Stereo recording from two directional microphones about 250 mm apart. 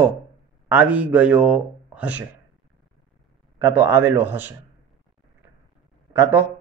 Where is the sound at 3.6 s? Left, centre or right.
Centre.